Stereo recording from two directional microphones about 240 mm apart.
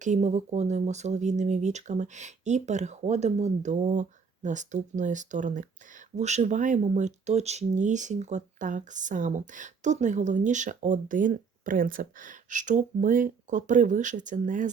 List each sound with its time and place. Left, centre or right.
0.0 s speech: right